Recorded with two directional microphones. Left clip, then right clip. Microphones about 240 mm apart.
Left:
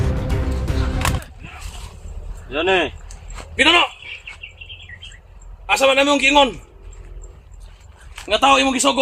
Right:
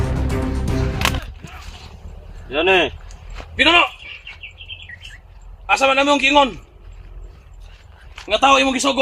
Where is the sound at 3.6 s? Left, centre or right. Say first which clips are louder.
Right 1 dB; left.